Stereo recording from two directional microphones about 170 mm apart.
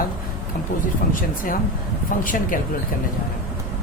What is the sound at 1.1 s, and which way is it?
Speech, 55° left (ahead or behind).